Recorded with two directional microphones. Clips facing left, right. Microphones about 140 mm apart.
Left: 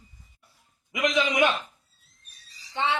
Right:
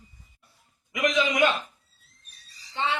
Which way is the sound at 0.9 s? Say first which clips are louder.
Even; 25° left (ahead or behind).